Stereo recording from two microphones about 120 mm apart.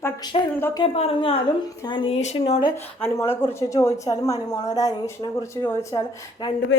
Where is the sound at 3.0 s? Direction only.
20° left (ahead or behind).